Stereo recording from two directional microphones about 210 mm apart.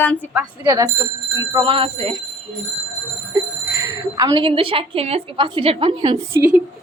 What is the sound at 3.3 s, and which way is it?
Speech, 10° right (ahead or behind).